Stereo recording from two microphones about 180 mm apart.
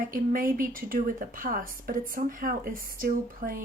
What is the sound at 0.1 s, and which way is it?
Speech, 50° right (ahead or behind).